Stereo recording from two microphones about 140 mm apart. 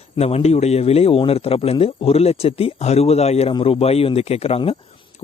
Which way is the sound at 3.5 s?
40° left (ahead or behind).